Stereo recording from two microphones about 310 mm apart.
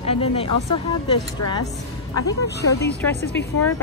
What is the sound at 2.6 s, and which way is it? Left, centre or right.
Speech, left.